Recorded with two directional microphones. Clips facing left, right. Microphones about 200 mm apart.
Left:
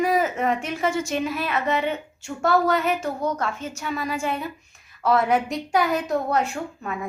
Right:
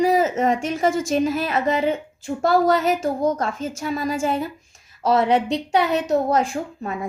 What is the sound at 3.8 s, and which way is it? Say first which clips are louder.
A woman's voice: right 4 dB; 35° right (ahead or behind).